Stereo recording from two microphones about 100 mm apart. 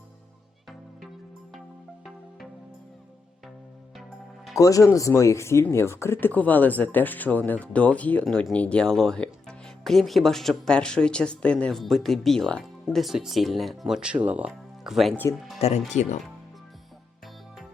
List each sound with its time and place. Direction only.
4.5 s speech: 35° left (ahead or behind); by 13.0 s 5° left (ahead or behind)
13.0 s speech: 5° right (ahead or behind)
14.8 s speech: centre (ahead or behind)
15.5 s speech: 90° left